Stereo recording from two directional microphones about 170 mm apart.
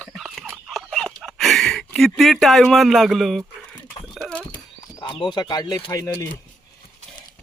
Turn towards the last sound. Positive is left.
turn(degrees=20)  # may be behind; listen again after turning